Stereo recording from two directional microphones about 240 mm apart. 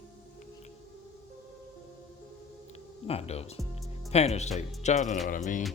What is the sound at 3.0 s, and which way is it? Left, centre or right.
Speech, left.